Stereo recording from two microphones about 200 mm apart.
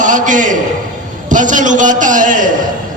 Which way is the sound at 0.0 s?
40° right (ahead or behind).